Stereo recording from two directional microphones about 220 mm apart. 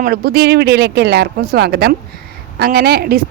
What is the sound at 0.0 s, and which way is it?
A woman's voice, 45° right (ahead or behind).